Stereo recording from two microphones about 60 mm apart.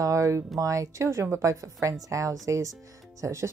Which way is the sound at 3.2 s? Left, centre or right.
Right.